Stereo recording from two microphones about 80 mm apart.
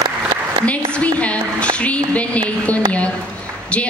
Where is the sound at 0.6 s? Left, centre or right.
Centre.